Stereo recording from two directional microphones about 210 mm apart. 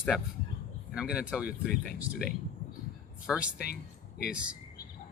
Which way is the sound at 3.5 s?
50° left (ahead or behind).